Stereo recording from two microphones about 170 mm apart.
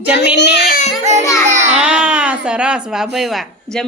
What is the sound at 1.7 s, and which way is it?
A woman's voice, 5° right (ahead or behind).